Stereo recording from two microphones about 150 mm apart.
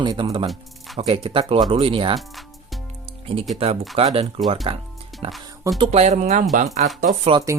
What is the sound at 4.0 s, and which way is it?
Speech, 45° right (ahead or behind).